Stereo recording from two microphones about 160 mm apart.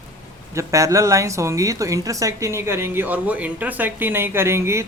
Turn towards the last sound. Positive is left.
turn(degrees=-15)  # may be behind; listen again after turning